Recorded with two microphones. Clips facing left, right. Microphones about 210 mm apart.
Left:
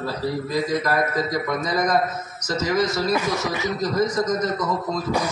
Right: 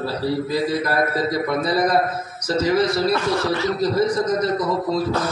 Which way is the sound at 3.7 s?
30° right (ahead or behind).